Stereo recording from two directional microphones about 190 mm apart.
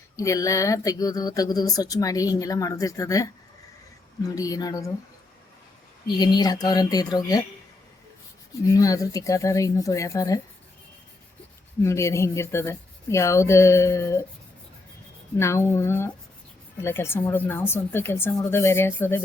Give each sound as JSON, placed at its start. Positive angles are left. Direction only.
{"t": 0.2, "sound": "speech", "side_deg": 15}
{"t": 6.1, "sound": "speech", "side_deg": 20}
{"t": 8.6, "sound": "speech", "side_deg": 20}
{"t": 11.8, "sound": "speech", "side_deg": 15}
{"t": 15.4, "sound": "speech", "side_deg": 15}